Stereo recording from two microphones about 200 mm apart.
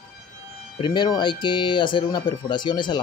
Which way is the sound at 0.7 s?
25° left (ahead or behind).